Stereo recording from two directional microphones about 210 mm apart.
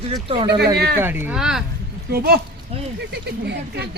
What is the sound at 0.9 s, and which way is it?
Speech, 10° right (ahead or behind).